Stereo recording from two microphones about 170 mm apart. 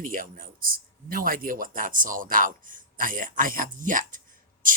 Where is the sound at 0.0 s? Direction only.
55° right (ahead or behind).